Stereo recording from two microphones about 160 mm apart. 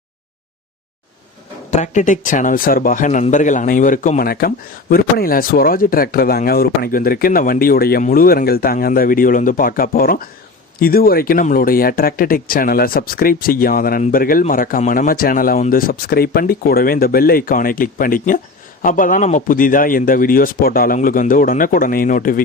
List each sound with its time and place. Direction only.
1.7 s speech: 50° left (ahead or behind)
4.3 s speech: 70° left (ahead or behind)